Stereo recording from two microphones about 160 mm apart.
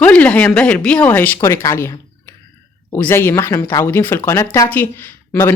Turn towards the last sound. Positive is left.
turn(degrees=15)  # may be behind; listen again after turning